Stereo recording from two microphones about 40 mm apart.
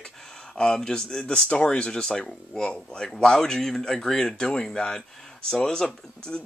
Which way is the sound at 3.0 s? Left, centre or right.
Centre.